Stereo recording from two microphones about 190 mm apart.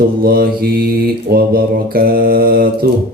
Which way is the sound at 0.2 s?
50° right (ahead or behind).